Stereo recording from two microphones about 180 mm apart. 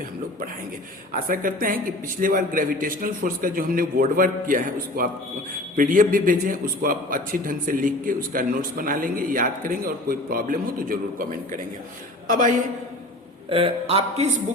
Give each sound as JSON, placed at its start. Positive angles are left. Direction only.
{"t": 1.1, "sound": "a man's voice", "side_deg": -50}
{"t": 13.5, "sound": "a man's voice", "side_deg": -30}